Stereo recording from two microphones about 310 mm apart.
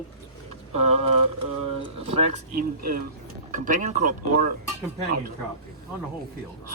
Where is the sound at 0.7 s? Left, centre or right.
Centre.